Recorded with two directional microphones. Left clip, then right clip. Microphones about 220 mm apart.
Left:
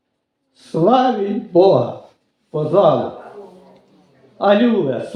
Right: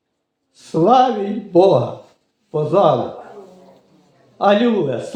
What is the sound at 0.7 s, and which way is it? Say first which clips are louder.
Speech: right 1 dB; 30° right (ahead or behind).